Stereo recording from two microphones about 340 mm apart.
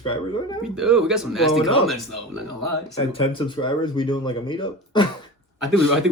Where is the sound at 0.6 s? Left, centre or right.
Centre.